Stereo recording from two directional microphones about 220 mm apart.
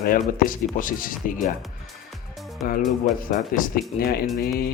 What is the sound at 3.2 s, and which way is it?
Speech, 40° left (ahead or behind).